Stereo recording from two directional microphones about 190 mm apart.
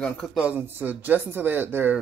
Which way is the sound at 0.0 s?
Centre (ahead or behind).